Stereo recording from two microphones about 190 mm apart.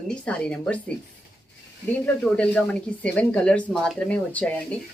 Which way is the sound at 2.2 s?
5° left (ahead or behind).